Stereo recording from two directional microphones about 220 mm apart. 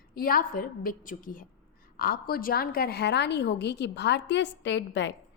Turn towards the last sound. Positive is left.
turn(degrees=55)  # may be behind; listen again after turning